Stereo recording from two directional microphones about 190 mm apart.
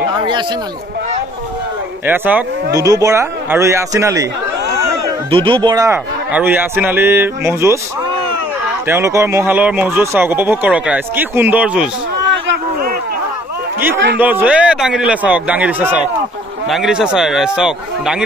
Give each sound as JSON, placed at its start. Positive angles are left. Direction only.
{"t": 2.0, "sound": "speech", "side_deg": -10}
{"t": 5.3, "sound": "speech", "side_deg": -25}
{"t": 6.3, "sound": "speech", "side_deg": -10}
{"t": 8.8, "sound": "speech", "side_deg": -15}
{"t": 14.1, "sound": "a man's voice", "side_deg": -10}